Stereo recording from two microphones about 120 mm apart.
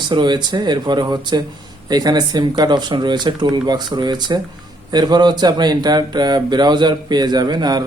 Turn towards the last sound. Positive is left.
turn(degrees=-35)  # may be behind; listen again after turning